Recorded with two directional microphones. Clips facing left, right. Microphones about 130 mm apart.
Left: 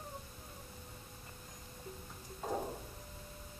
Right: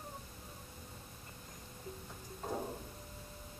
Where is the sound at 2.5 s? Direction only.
10° left (ahead or behind).